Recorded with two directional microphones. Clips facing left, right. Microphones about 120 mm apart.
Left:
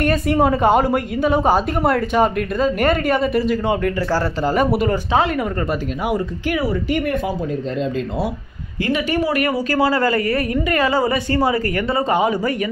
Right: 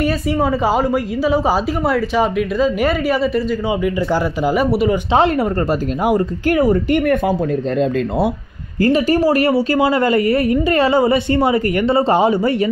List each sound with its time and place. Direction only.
0.0 s a woman's voice: centre (ahead or behind)
5.1 s speech: 30° right (ahead or behind); by 7.3 s 55° right (ahead or behind)
8.8 s a woman's voice: 40° right (ahead or behind)